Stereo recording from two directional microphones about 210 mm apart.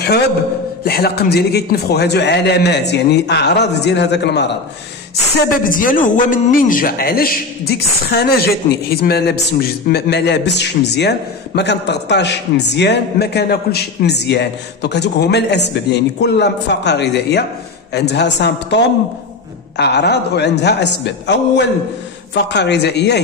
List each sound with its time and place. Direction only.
0.8 s a man's voice: 50° left (ahead or behind)
5.5 s a man's voice: 40° left (ahead or behind)